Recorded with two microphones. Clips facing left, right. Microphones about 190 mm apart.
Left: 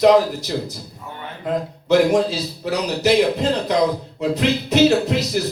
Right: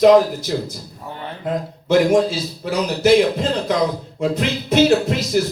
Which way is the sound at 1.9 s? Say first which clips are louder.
Right 1 dB; 50° right (ahead or behind).